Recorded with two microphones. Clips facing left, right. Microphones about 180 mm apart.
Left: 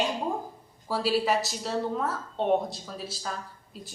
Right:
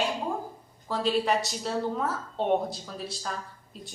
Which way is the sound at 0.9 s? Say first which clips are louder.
Even; 5° left (ahead or behind).